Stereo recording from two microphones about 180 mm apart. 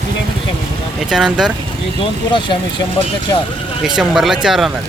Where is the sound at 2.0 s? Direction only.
25° left (ahead or behind).